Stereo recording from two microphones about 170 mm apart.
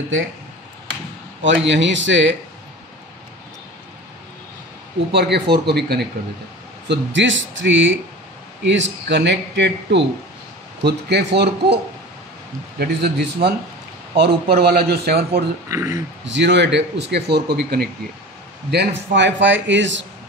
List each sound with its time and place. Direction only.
1.4 s speech: 90° right
5.1 s a man's voice: 75° right (ahead or behind)
6.9 s speech: 90° right
10.8 s a man's voice: 75° right (ahead or behind)
15.7 s speech: 20° right (ahead or behind)
16.3 s speech: 90° right; by 17.8 s 70° right (ahead or behind)
18.7 s speech: 85° right